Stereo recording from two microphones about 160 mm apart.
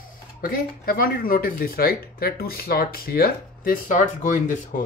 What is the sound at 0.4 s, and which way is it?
Speech, 65° left (ahead or behind).